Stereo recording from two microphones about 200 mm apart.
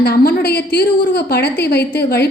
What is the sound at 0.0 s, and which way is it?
A woman's voice, 55° left (ahead or behind).